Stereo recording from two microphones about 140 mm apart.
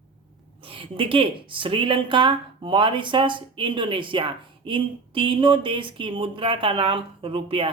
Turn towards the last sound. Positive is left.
turn(degrees=-40)  # may be behind; listen again after turning